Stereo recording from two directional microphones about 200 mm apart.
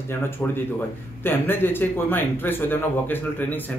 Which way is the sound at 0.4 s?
5° left (ahead or behind).